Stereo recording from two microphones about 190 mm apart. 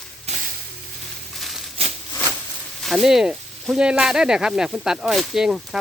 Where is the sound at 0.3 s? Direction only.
35° right (ahead or behind).